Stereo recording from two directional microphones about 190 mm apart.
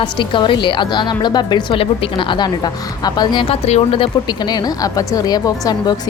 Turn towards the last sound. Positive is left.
turn(degrees=20)  # may be behind; listen again after turning